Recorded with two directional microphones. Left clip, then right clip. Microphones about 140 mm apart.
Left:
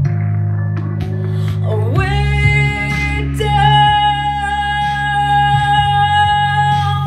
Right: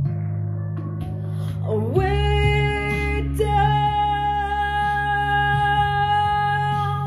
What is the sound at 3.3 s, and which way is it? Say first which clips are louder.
Music: left 8 dB; 50° right (ahead or behind).